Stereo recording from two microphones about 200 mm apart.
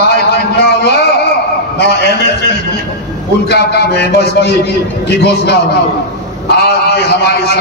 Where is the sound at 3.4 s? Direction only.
55° left (ahead or behind).